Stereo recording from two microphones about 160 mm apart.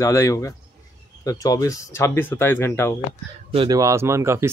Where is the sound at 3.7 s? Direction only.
20° right (ahead or behind).